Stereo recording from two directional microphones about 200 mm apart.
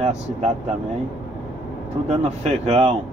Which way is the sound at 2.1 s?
30° right (ahead or behind).